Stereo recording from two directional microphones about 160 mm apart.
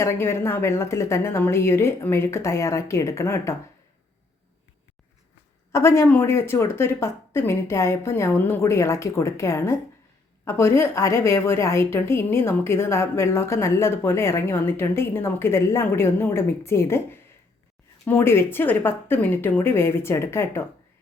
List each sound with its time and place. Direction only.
0.0 s a woman's voice: 15° left (ahead or behind)
5.7 s a woman's voice: 15° left (ahead or behind)